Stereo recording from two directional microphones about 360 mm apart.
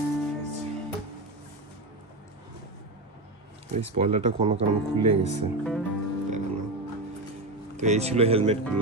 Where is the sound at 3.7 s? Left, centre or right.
Centre.